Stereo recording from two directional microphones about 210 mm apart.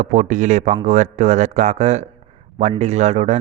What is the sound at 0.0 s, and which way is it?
Speech, 35° right (ahead or behind).